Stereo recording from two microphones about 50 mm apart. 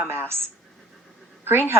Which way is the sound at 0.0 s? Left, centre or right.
Right.